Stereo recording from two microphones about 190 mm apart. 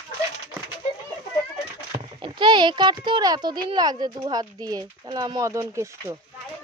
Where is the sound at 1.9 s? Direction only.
25° right (ahead or behind).